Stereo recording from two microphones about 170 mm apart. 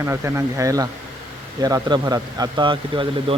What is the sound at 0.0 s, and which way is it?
Speech, 15° right (ahead or behind).